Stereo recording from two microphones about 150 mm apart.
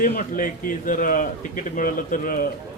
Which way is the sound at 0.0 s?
60° left (ahead or behind).